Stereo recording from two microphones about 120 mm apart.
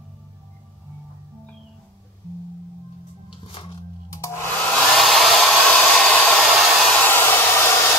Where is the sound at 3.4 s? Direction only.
45° left (ahead or behind).